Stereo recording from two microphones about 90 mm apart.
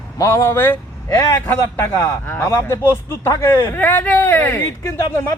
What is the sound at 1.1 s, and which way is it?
A man's voice, 40° left (ahead or behind).